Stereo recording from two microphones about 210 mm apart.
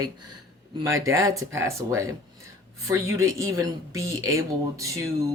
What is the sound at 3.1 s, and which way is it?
Speech, 15° right (ahead or behind).